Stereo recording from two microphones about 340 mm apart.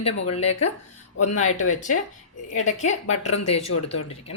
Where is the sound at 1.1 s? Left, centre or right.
Left.